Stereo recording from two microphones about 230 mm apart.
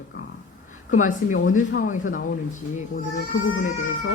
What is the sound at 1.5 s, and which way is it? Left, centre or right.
Speech, left.